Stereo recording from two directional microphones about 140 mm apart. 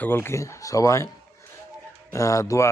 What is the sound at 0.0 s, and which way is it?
A man's voice, 15° left (ahead or behind).